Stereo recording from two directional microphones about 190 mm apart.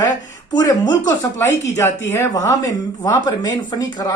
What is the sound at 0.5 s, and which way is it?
Speech, 20° left (ahead or behind).